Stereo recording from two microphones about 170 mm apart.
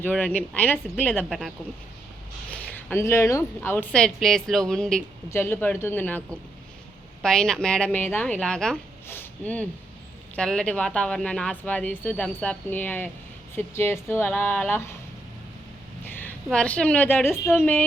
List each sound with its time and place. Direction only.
0.0 s speech: 10° left (ahead or behind)
1.2 s speech: centre (ahead or behind)
2.5 s speech: 10° left (ahead or behind)
16.0 s a woman's voice: 10° left (ahead or behind)